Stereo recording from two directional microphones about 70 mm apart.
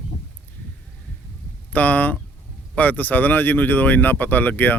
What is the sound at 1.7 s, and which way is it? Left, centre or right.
Speech, left.